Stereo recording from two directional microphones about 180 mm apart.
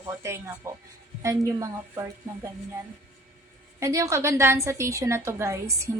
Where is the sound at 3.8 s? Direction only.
15° right (ahead or behind).